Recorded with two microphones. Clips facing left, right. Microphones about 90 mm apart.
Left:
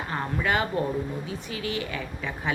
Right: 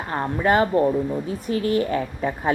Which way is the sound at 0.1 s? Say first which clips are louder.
Right 7 dB; 35° right (ahead or behind).